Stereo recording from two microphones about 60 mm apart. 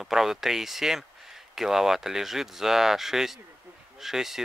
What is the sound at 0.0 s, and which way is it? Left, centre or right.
Speech, centre.